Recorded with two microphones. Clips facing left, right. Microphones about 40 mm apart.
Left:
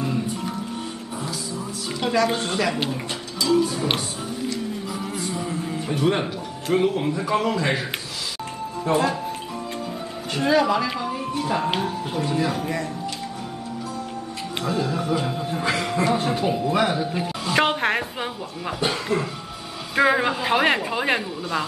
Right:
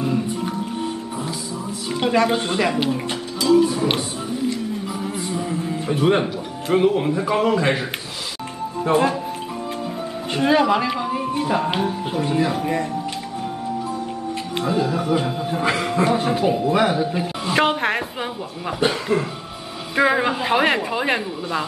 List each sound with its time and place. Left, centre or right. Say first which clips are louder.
0.0 s music: right 3 dB; centre
2.0 s music: right 3 dB; right
2.2 s a woman's voice: right 3 dB; centre
2.9 s music: right 5 dB; centre
5.1 s music: right 2 dB; centre
5.9 s a woman's voice: right 4 dB; right
8.8 s speech: right 3 dB; right
10.3 s a woman's voice: right 2 dB; right
10.9 s music: right 4 dB; centre
11.5 s speech: right 1 dB; centre
14.8 s a woman's voice: right 3 dB; centre
20.0 s speech: right 1 dB; centre